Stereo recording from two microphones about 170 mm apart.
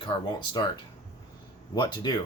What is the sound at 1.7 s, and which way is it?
Speech, 25° left (ahead or behind).